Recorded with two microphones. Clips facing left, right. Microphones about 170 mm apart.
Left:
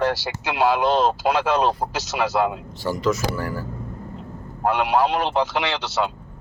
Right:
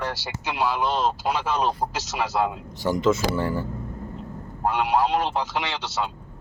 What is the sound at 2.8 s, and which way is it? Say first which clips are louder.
Speech: right 1 dB; 20° right (ahead or behind).